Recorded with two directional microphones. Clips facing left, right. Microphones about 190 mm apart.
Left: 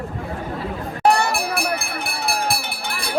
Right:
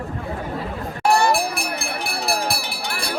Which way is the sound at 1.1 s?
65° left (ahead or behind).